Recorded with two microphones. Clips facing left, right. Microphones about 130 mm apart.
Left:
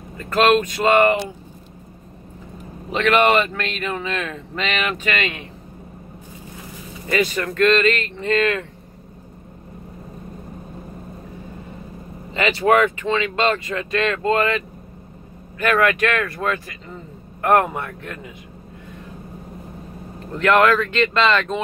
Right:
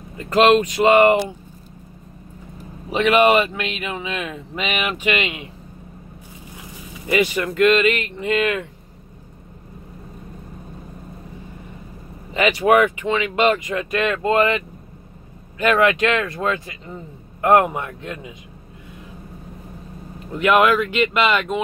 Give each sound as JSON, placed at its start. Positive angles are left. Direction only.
{"t": 0.2, "sound": "speech", "side_deg": -15}
{"t": 2.9, "sound": "speech", "side_deg": -10}
{"t": 7.1, "sound": "speech", "side_deg": -15}
{"t": 12.4, "sound": "speech", "side_deg": -15}
{"t": 15.6, "sound": "speech", "side_deg": -20}
{"t": 20.3, "sound": "speech", "side_deg": -10}